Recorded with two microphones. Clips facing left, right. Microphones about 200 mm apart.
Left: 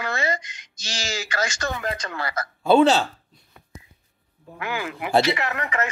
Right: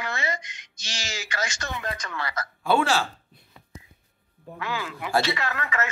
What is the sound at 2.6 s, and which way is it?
Speech, 20° left (ahead or behind).